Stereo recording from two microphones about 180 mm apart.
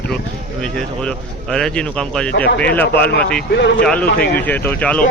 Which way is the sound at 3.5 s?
80° left.